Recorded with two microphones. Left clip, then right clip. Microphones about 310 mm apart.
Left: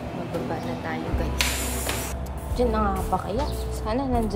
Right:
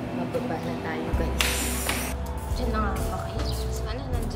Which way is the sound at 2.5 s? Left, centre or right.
Centre.